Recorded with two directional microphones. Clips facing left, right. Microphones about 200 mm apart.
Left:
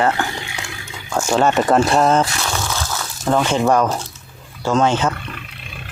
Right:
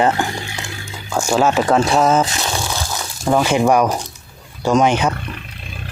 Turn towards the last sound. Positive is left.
turn(degrees=-15)  # may be behind; listen again after turning